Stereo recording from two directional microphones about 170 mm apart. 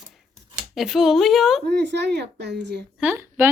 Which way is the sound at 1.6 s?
80° right.